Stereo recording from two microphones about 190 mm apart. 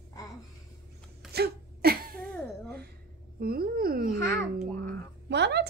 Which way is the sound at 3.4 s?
55° right (ahead or behind).